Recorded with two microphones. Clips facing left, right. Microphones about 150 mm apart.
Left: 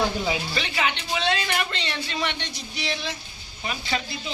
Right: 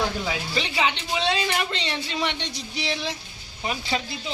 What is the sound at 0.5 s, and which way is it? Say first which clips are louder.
Speech: right 2 dB; 20° right (ahead or behind).